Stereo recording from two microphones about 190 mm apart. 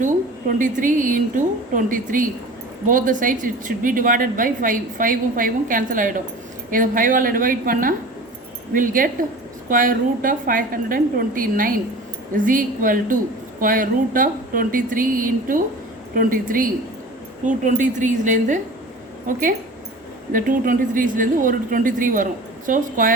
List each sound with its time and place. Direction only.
0.0 s a woman's voice: 45° right (ahead or behind)